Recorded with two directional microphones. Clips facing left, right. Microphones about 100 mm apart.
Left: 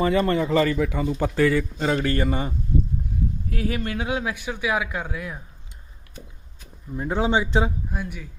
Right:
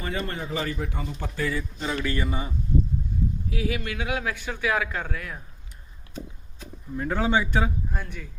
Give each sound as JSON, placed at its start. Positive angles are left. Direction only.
{"t": 0.1, "sound": "a man's voice", "side_deg": 90}
{"t": 2.0, "sound": "speech", "side_deg": 50}
{"t": 3.5, "sound": "a man's voice", "side_deg": 45}
{"t": 6.9, "sound": "speech", "side_deg": 20}
{"t": 7.9, "sound": "a man's voice", "side_deg": 5}